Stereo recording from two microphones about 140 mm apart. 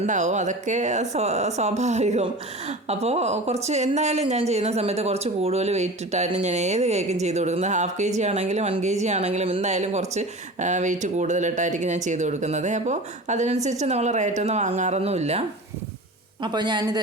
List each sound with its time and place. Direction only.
0.0 s speech: 60° right (ahead or behind)
16.4 s a woman's voice: 30° right (ahead or behind)